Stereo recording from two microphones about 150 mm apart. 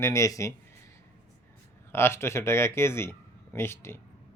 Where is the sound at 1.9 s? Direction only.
15° left (ahead or behind).